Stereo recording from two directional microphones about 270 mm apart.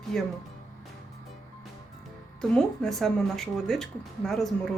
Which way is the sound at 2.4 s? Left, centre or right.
Centre.